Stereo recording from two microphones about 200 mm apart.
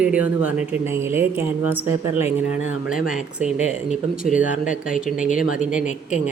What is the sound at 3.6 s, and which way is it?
Speech, 35° left (ahead or behind).